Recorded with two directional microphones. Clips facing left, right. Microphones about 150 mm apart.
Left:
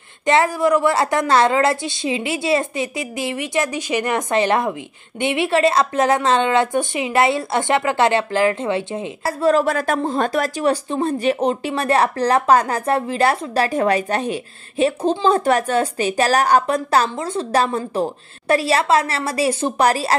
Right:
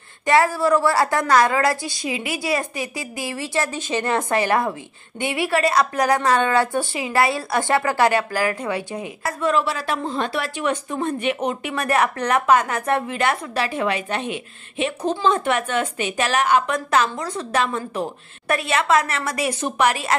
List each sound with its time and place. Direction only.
0.3 s a woman's voice: 20° left (ahead or behind); by 20.2 s 35° left (ahead or behind)